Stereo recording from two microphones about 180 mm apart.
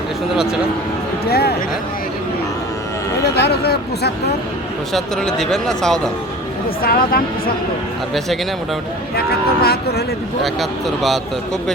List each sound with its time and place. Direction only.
1.3 s speech: 60° left (ahead or behind)
3.3 s speech: 65° left (ahead or behind)
4.9 s speech: centre (ahead or behind)
6.8 s speech: 55° left (ahead or behind)
9.1 s speech: 60° left (ahead or behind)
10.4 s speech: centre (ahead or behind)